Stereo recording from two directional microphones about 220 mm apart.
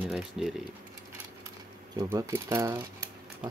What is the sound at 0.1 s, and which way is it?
Speech, centre (ahead or behind).